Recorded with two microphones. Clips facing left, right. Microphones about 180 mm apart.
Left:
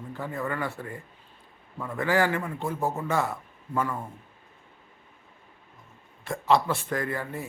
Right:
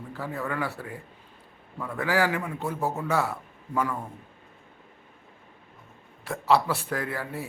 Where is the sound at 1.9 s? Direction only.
5° right (ahead or behind).